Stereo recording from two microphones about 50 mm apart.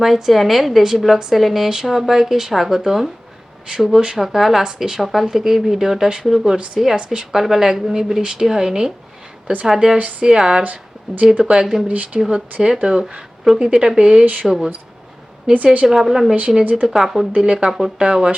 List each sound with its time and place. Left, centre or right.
0.0 s a woman's voice: centre
7.3 s speech: centre
10.0 s speech: right
10.2 s speech: centre
10.6 s speech: right
11.5 s speech: centre
11.9 s speech: right
12.6 s a woman's voice: centre
15.5 s speech: right
15.9 s speech: centre
17.3 s speech: centre
17.7 s a woman's voice: centre